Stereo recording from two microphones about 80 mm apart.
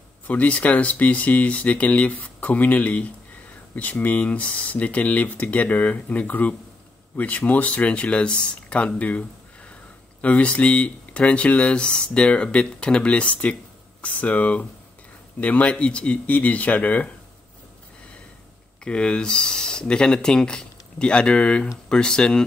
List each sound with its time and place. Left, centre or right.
0.3 s speech: centre
10.2 s speech: centre
18.9 s speech: centre